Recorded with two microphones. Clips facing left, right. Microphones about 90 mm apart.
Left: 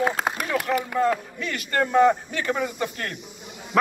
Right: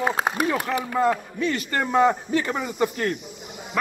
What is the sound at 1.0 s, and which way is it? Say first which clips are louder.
Speech: right 1 dB; 15° right (ahead or behind).